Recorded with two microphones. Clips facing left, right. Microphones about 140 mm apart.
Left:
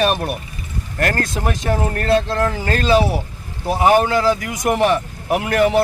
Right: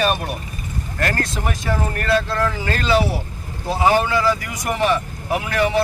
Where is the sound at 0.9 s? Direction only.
50° left (ahead or behind).